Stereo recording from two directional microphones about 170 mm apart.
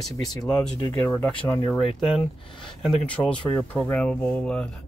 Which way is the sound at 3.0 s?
5° left (ahead or behind).